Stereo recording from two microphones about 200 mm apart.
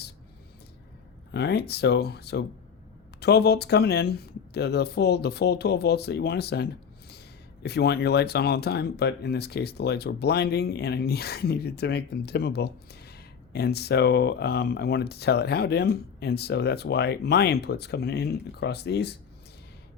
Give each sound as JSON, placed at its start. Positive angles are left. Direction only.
{"t": 1.3, "sound": "speech", "side_deg": 55}